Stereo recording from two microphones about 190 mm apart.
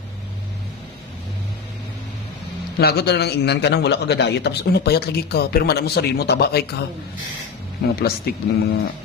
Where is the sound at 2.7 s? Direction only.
55° left (ahead or behind).